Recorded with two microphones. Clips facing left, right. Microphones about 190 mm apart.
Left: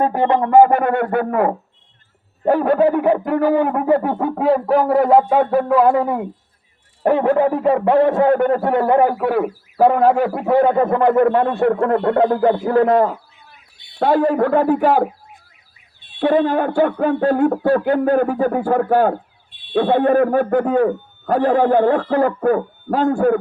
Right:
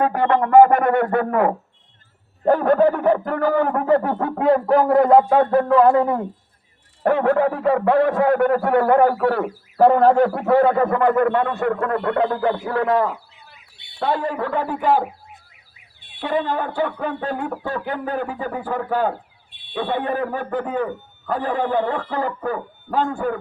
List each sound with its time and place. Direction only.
0.0 s a man's voice: 25° left (ahead or behind); by 15.0 s 50° left (ahead or behind)
16.2 s speech: 50° left (ahead or behind)
21.6 s speech: 60° left (ahead or behind)